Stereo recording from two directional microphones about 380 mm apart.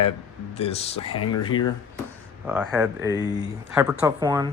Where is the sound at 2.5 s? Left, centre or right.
Centre.